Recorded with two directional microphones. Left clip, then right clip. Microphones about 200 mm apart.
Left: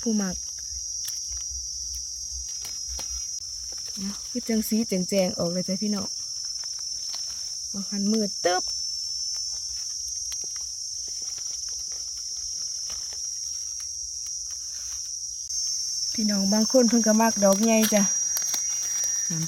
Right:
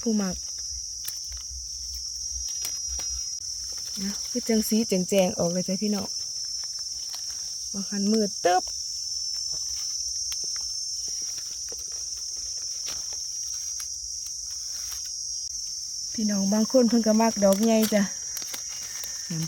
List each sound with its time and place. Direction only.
0.0 s cricket: 10° right (ahead or behind)
4.0 s cricket: 20° right (ahead or behind)
7.9 s cricket: 10° right (ahead or behind)
16.1 s speech: centre (ahead or behind)
17.9 s a sound: centre (ahead or behind)